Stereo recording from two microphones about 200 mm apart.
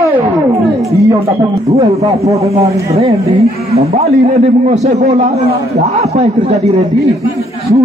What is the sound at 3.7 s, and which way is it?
A man's voice, 30° right (ahead or behind).